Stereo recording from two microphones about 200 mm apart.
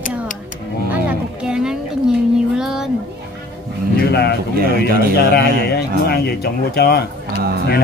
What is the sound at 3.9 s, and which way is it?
Speech, 55° left (ahead or behind).